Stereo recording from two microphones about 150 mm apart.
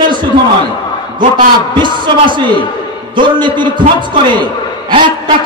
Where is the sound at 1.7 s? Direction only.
30° right (ahead or behind).